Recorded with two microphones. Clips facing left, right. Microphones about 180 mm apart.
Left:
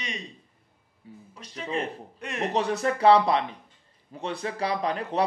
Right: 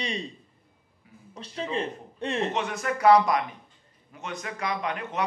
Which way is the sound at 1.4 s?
30° right (ahead or behind).